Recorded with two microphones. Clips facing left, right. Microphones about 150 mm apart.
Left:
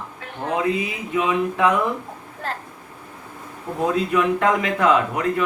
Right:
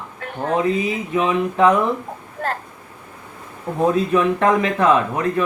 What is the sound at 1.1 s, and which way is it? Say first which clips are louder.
Speech: right 1 dB; 30° right (ahead or behind).